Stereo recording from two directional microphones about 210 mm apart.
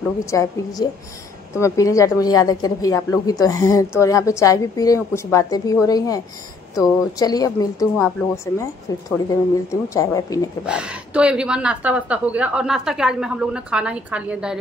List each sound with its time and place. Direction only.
0.2 s speech: 15° left (ahead or behind)
10.6 s a woman's voice: 5° right (ahead or behind)